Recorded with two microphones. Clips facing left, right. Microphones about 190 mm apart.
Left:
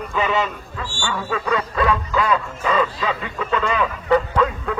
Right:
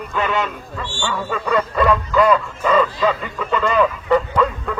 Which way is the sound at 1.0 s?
Centre (ahead or behind).